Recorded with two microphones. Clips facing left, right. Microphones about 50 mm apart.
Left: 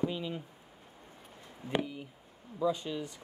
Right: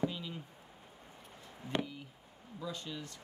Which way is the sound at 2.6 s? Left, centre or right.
Centre.